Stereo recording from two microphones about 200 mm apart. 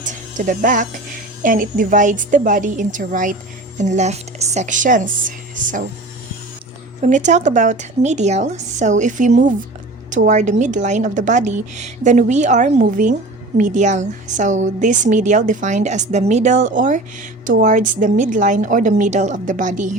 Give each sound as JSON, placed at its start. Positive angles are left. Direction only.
{"t": 0.0, "sound": "a woman's voice", "side_deg": -40}
{"t": 7.0, "sound": "a woman's voice", "side_deg": -35}